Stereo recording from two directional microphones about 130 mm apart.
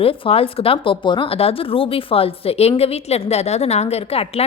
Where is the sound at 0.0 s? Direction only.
50° left (ahead or behind).